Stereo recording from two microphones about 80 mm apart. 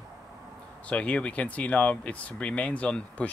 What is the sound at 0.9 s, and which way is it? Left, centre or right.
Speech, centre.